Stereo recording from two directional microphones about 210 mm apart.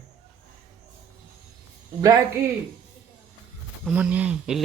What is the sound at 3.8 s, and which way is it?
Speech, 5° right (ahead or behind).